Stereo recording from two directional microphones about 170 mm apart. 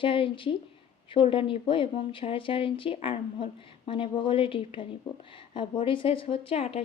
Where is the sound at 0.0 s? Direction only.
30° left (ahead or behind).